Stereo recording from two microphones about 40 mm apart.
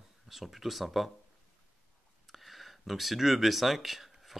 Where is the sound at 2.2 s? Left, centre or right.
Centre.